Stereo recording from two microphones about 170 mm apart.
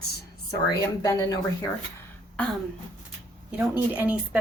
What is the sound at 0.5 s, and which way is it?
Speech, 20° left (ahead or behind).